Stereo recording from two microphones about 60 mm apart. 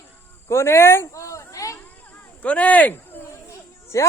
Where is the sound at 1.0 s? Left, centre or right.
Left.